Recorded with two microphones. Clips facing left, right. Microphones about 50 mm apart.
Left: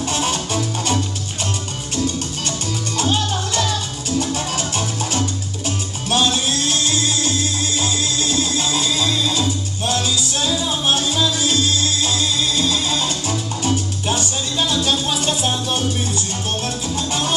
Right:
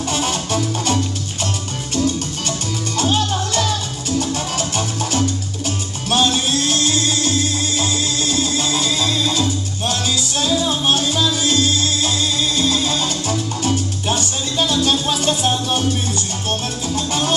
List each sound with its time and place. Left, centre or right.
0.1 s music: centre
10.3 s salsa music: centre
16.9 s music: centre